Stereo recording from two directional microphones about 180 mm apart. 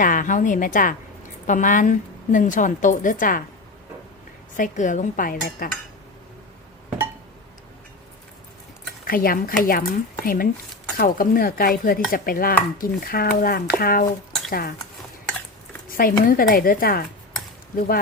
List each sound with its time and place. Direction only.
0.0 s a woman's voice: 45° left (ahead or behind)
4.5 s a woman's voice: 45° left (ahead or behind)
9.0 s a woman's voice: 50° left (ahead or behind)
15.9 s a woman's voice: 50° left (ahead or behind)